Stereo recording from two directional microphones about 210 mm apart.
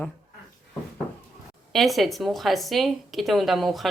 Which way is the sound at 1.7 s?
Centre (ahead or behind).